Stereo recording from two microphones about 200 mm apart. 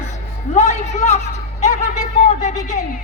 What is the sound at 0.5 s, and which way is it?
A man's voice, 35° left (ahead or behind).